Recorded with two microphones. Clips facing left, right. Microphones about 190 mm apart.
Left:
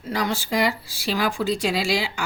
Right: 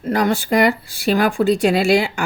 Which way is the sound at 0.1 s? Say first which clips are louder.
Right 7 dB; 55° right (ahead or behind).